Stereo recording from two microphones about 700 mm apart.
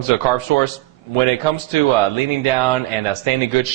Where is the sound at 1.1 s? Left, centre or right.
Right.